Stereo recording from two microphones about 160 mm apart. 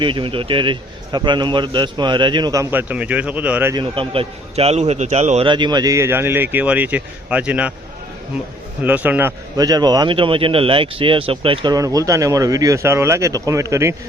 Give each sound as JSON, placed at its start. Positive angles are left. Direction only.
{"t": 0.0, "sound": "speech", "side_deg": -30}
{"t": 3.8, "sound": "a man's voice", "side_deg": -35}
{"t": 5.5, "sound": "speech", "side_deg": -30}
{"t": 8.8, "sound": "speech", "side_deg": -10}
{"t": 9.6, "sound": "speech", "side_deg": -25}